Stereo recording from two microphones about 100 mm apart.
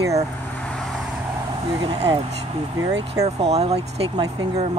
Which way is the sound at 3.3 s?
90° right.